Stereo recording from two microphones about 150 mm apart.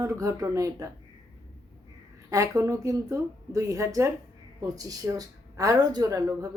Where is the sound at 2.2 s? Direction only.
20° right (ahead or behind).